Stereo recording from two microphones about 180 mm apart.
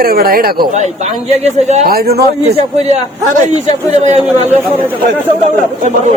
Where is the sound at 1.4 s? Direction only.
40° right (ahead or behind).